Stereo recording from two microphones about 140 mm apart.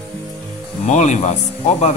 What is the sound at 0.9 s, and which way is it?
Speech, 55° left (ahead or behind).